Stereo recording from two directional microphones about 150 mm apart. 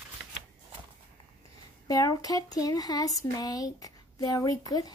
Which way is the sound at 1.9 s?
25° left (ahead or behind).